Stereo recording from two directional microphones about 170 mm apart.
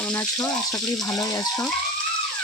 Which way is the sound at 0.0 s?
10° left (ahead or behind).